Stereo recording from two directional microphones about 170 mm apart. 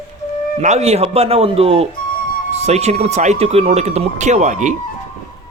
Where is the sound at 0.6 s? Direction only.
40° right (ahead or behind).